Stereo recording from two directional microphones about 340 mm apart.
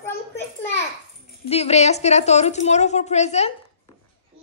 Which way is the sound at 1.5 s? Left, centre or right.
Centre.